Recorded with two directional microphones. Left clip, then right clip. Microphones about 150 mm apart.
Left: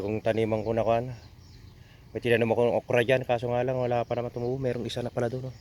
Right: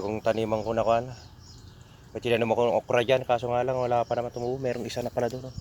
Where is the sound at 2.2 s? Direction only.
70° left (ahead or behind).